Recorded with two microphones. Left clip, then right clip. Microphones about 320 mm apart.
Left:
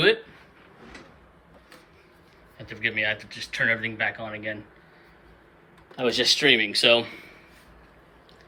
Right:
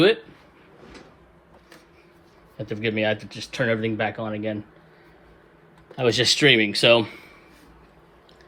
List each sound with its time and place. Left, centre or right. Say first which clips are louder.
2.6 s speech: right 1 dB; centre
6.0 s a man's voice: right 3 dB; right